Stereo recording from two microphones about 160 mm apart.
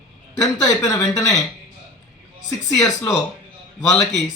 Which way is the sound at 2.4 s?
20° left (ahead or behind).